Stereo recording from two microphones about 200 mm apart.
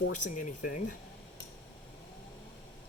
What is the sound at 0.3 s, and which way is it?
Speech, 40° left (ahead or behind).